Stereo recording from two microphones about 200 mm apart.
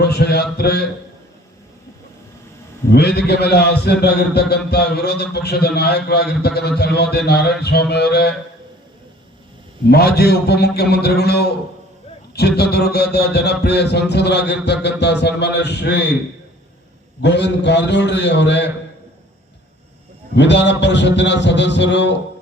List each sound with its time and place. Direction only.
0.0 s a sound: 55° left (ahead or behind)
0.5 s a man's voice: 50° left (ahead or behind)
2.9 s a man's voice: 55° left (ahead or behind)
9.9 s a man's voice: 50° left (ahead or behind)
17.2 s a man's voice: 60° left (ahead or behind)
20.3 s a man's voice: 60° left (ahead or behind)